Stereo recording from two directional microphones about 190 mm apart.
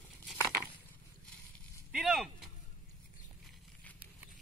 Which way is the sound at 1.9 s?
5° right (ahead or behind).